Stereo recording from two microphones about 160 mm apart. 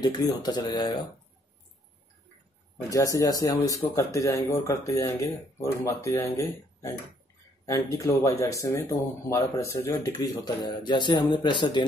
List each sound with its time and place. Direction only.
0.0 s speech: 25° left (ahead or behind)
2.9 s speech: 20° left (ahead or behind)